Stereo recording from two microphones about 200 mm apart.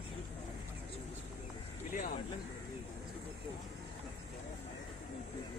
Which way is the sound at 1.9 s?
45° left (ahead or behind).